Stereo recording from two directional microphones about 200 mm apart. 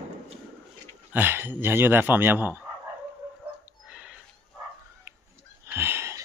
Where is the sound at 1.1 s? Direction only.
10° right (ahead or behind).